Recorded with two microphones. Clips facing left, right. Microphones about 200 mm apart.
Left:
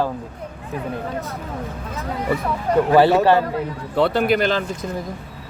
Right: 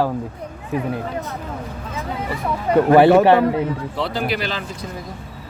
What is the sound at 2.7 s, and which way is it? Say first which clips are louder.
Speech: right 3 dB; 15° right (ahead or behind).